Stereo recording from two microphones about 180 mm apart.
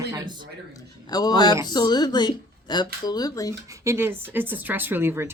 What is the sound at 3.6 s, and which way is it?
Speech, 15° right (ahead or behind).